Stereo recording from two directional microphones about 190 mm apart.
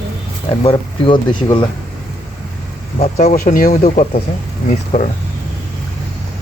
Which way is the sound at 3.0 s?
40° left (ahead or behind).